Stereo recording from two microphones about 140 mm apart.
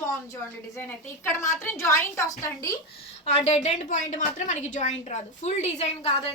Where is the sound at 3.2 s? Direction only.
50° left (ahead or behind).